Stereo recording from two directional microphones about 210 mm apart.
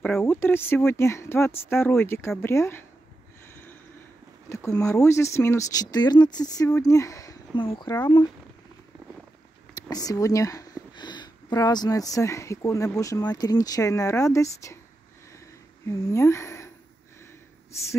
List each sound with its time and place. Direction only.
0.0 s speech: 10° left (ahead or behind)
4.5 s speech: 15° left (ahead or behind)
9.8 s speech: 20° left (ahead or behind)
15.9 s speech: 15° left (ahead or behind)